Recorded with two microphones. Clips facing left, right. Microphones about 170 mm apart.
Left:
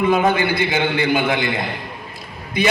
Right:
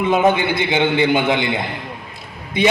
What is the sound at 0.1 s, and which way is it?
A man's voice, 20° right (ahead or behind).